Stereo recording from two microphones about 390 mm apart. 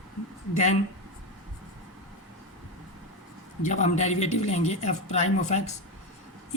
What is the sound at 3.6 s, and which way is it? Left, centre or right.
Speech, centre.